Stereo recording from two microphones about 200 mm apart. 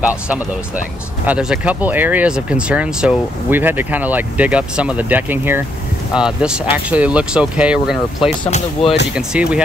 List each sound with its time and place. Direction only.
0.0 s speech: 5° right (ahead or behind)
8.5 s speech: 35° left (ahead or behind)
9.1 s speech: 5° right (ahead or behind)